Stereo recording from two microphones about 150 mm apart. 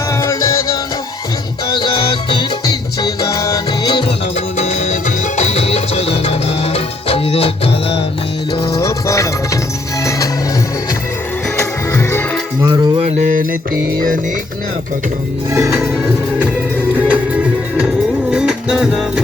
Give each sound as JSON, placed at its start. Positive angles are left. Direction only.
{"t": 0.2, "sound": "music", "side_deg": 20}
{"t": 5.5, "sound": "music", "side_deg": 45}
{"t": 8.7, "sound": "music", "side_deg": 25}
{"t": 11.5, "sound": "music", "side_deg": 20}
{"t": 13.9, "sound": "music", "side_deg": -70}
{"t": 17.1, "sound": "music", "side_deg": -10}